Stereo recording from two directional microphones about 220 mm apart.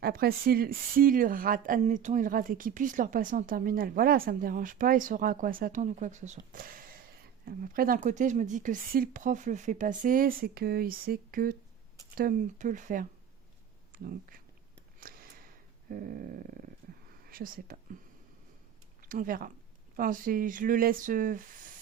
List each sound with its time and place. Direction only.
0.0 s speech: 45° right (ahead or behind)
15.0 s a sound: 40° right (ahead or behind)
15.9 s speech: 40° right (ahead or behind)
19.0 s speech: 40° right (ahead or behind)